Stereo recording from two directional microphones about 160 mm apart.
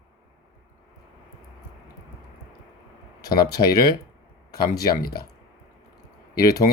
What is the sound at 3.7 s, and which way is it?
Speech, 80° left.